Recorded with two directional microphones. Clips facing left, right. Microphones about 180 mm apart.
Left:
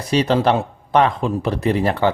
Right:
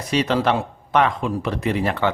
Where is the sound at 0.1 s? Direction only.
35° left (ahead or behind).